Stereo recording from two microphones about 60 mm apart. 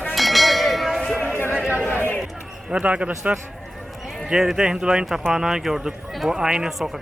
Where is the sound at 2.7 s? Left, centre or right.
Right.